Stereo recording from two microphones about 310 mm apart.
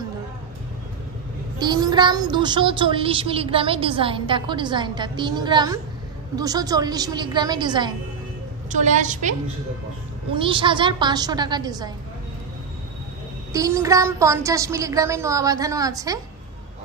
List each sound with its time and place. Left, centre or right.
1.6 s a child's voice: centre
10.3 s a child's voice: centre
13.5 s a child's voice: centre